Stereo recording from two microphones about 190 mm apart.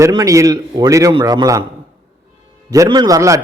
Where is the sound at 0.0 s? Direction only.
20° right (ahead or behind).